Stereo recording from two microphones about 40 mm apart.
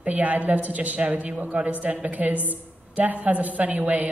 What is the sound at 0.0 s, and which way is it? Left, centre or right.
A woman's voice, right.